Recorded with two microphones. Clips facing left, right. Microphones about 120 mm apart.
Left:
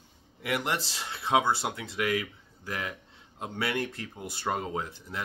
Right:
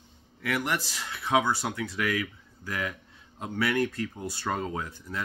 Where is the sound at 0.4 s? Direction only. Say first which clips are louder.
Right 1 dB; 20° left (ahead or behind).